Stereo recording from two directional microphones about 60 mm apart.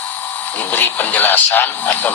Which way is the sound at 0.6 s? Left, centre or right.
Left.